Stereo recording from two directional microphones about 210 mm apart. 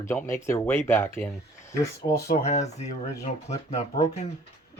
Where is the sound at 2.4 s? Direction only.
30° left (ahead or behind).